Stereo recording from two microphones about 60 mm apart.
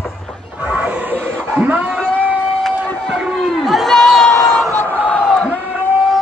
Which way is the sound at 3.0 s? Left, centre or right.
Centre.